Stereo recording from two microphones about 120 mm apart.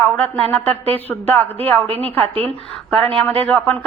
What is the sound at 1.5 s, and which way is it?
Speech, 55° right (ahead or behind).